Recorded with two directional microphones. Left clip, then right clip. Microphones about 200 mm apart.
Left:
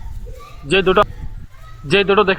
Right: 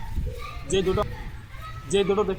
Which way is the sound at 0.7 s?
20° left (ahead or behind).